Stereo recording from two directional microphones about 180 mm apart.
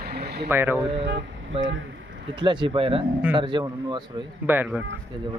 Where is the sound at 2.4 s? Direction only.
25° right (ahead or behind).